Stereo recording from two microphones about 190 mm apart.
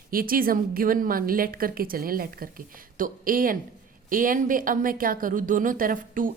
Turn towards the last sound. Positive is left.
turn(degrees=-45)  # may be behind; listen again after turning